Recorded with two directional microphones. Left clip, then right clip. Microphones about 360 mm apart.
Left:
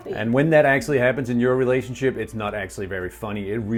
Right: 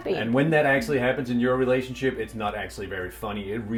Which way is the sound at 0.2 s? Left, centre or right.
Left.